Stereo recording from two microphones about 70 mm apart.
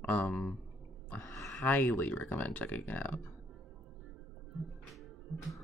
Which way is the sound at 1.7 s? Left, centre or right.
Left.